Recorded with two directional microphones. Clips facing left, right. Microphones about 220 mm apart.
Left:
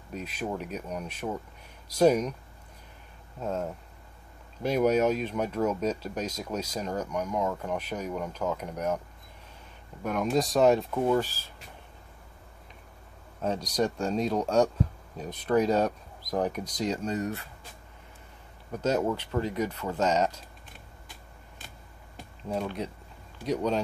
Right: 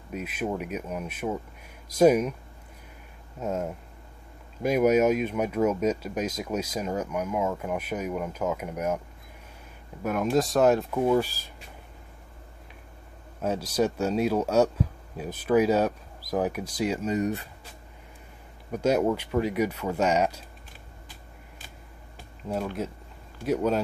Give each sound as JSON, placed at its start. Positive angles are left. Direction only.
{"t": 0.1, "sound": "speech", "side_deg": -10}
{"t": 3.3, "sound": "speech", "side_deg": -10}
{"t": 10.0, "sound": "speech", "side_deg": -5}
{"t": 13.4, "sound": "speech", "side_deg": -5}
{"t": 18.7, "sound": "speech", "side_deg": -10}
{"t": 22.5, "sound": "speech", "side_deg": -5}